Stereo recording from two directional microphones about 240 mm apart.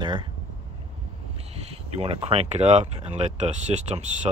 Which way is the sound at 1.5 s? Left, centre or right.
Right.